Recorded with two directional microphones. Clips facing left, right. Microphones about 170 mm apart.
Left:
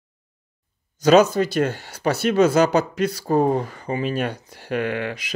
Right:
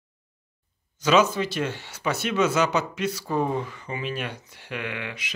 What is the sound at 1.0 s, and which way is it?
Speech, 40° left (ahead or behind).